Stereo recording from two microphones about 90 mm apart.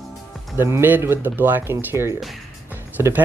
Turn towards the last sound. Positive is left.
turn(degrees=-30)  # may be behind; listen again after turning